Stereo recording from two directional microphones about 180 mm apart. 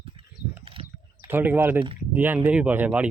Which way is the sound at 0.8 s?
30° right (ahead or behind).